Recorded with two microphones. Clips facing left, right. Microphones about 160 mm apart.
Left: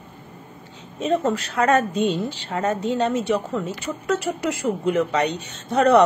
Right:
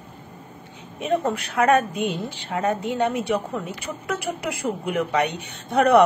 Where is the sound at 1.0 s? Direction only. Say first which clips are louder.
Left 2 dB; 15° right (ahead or behind).